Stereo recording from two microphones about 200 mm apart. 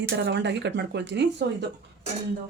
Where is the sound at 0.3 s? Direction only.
60° right (ahead or behind).